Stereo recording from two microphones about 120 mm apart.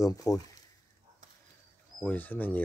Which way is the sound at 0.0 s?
30° left (ahead or behind).